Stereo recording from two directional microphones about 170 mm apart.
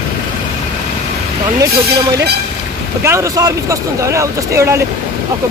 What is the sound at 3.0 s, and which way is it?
Speech, 15° right (ahead or behind).